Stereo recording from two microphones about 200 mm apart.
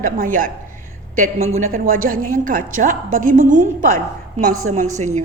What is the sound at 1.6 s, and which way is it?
A woman's voice, 45° right (ahead or behind).